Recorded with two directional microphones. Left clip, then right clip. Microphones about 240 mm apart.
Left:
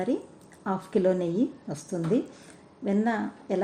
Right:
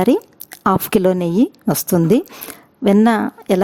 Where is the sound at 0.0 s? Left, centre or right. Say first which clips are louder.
Right 14 dB; right.